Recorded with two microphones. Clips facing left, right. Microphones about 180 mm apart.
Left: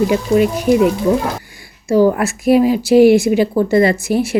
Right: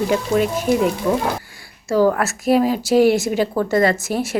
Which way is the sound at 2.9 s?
40° right (ahead or behind).